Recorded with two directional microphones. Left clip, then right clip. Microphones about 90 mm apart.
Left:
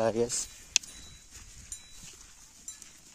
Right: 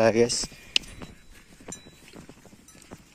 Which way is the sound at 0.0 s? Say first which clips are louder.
Right 8 dB; 5° right (ahead or behind).